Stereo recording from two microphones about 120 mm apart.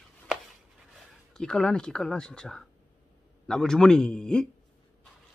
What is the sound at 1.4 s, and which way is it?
Speech, 5° left (ahead or behind).